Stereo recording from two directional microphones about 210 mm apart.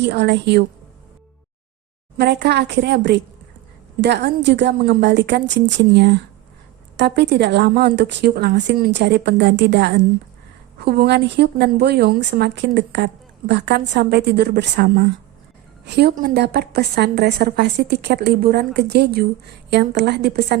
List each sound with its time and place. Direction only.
0.0 s a woman's voice: 50° right (ahead or behind)
2.1 s a woman's voice: 55° right (ahead or behind)